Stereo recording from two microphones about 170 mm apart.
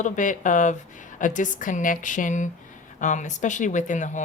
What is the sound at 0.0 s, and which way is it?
Speech, 50° left (ahead or behind).